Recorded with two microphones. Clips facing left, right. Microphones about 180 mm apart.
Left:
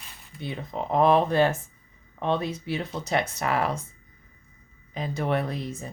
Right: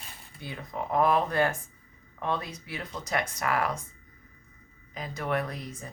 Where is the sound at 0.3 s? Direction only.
25° left (ahead or behind).